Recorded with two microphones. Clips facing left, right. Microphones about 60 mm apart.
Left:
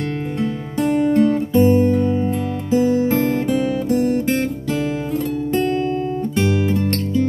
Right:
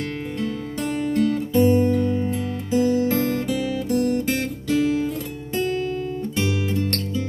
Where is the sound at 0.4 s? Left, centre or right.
Left.